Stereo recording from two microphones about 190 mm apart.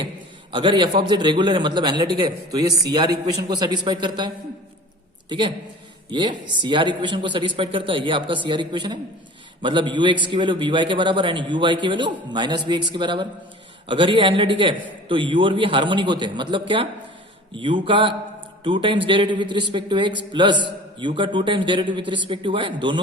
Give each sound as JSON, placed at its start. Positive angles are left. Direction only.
{"t": 0.5, "sound": "a man's voice", "side_deg": -25}
{"t": 6.1, "sound": "a man's voice", "side_deg": -25}